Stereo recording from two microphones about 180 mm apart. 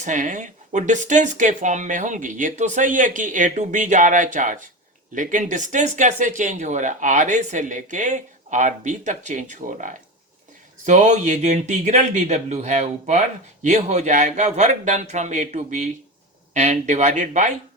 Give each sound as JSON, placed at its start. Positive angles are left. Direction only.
{"t": 0.0, "sound": "speech", "side_deg": -45}